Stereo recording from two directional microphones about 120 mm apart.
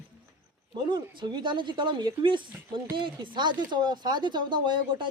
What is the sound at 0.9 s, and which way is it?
Speech, 40° right (ahead or behind).